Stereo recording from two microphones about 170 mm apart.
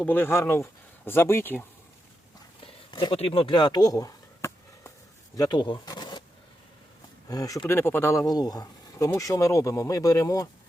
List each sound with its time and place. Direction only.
0.0 s speech: 10° left (ahead or behind)
2.9 s a sound: 30° left (ahead or behind)
5.4 s speech: 25° left (ahead or behind)
7.3 s speech: 20° left (ahead or behind)